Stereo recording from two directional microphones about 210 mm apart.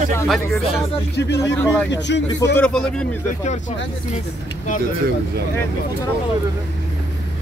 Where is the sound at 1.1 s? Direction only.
55° left (ahead or behind).